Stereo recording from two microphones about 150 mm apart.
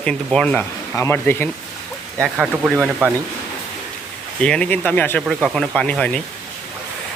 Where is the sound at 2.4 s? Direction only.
5° right (ahead or behind).